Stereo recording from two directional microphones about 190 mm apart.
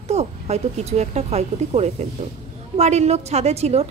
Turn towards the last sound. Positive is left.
turn(degrees=-35)  # may be behind; listen again after turning